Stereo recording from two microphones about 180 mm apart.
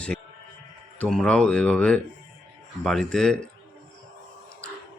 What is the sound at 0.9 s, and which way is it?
Speech, 5° left (ahead or behind).